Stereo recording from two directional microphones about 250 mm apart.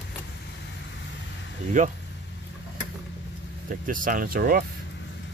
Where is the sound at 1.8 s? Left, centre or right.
Right.